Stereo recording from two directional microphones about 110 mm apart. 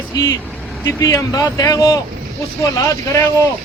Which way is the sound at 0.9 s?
25° left (ahead or behind).